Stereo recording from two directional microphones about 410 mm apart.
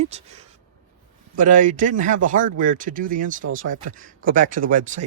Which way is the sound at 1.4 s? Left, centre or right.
Centre.